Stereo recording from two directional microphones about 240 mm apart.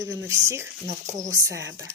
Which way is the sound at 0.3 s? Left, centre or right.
Centre.